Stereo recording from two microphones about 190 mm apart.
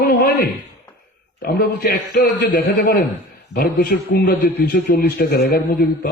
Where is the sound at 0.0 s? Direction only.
55° left (ahead or behind).